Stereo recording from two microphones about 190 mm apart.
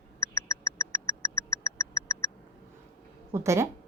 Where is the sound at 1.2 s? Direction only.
15° left (ahead or behind).